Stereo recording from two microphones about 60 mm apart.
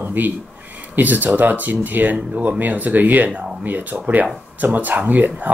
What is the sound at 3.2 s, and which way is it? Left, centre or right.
Speech, centre.